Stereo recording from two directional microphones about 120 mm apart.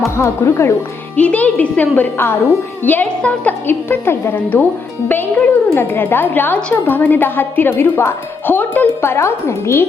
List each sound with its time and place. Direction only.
0.2 s speech: 20° left (ahead or behind)
1.1 s a woman's voice: 10° left (ahead or behind)